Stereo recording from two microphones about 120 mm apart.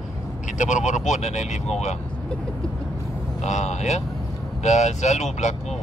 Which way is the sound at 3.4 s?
75° left (ahead or behind).